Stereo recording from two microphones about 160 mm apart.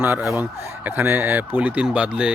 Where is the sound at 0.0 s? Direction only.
10° right (ahead or behind).